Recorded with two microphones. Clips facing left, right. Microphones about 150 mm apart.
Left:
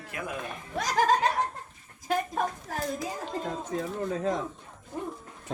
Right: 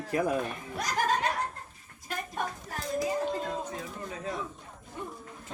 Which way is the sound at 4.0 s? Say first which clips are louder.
Left 9 dB; 45° left (ahead or behind).